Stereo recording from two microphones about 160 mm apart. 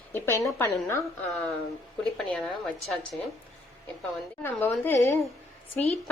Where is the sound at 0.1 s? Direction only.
15° left (ahead or behind).